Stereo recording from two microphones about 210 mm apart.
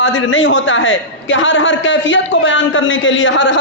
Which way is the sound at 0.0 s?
65° left (ahead or behind).